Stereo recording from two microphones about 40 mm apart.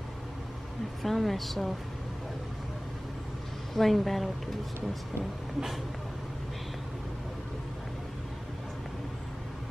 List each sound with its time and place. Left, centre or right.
1.0 s a woman's voice: centre
3.7 s a woman's voice: centre